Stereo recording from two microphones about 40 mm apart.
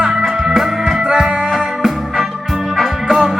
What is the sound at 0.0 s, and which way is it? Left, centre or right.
Music, centre.